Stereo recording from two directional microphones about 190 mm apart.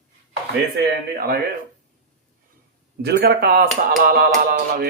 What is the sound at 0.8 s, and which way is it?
Speech, 60° right (ahead or behind).